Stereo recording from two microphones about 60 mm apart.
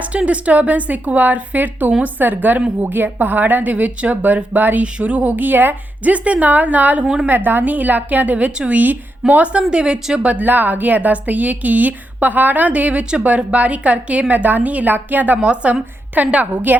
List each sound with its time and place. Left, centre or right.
0.0 s a woman's voice: right
7.0 s a woman's voice: centre
7.3 s a woman's voice: right; by 10.3 s centre
10.3 s a woman's voice: right